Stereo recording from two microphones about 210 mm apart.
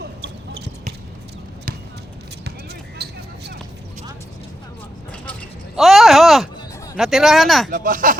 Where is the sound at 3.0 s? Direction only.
50° right (ahead or behind).